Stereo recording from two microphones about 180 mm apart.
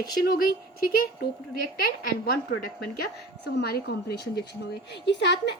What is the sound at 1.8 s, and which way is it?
A woman's voice, 60° left (ahead or behind).